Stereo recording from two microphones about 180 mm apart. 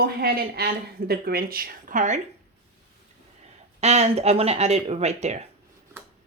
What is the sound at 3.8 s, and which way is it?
Speech, 35° right (ahead or behind).